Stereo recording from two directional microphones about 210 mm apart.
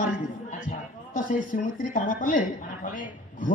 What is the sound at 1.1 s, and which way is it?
Speech, 40° left (ahead or behind).